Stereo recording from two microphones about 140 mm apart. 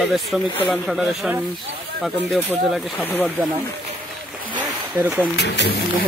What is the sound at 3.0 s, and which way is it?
Speech, 15° left (ahead or behind).